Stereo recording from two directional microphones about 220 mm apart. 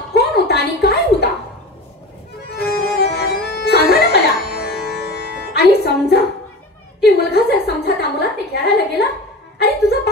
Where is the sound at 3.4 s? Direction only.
50° left (ahead or behind).